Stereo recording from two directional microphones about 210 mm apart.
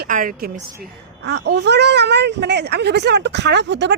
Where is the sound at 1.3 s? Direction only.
55° right (ahead or behind).